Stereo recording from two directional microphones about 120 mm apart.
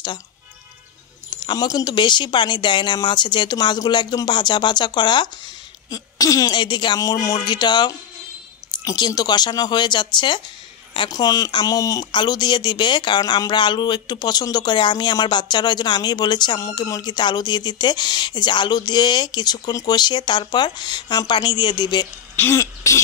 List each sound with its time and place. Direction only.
1.3 s speech: 35° left (ahead or behind)
22.3 s speech: 20° left (ahead or behind)